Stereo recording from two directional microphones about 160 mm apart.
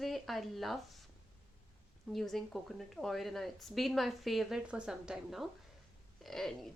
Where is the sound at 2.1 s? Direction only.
Centre (ahead or behind).